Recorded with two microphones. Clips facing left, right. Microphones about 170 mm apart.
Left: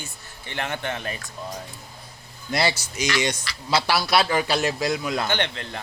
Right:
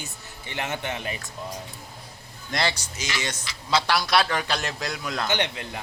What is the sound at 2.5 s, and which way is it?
A man's voice, 10° left (ahead or behind).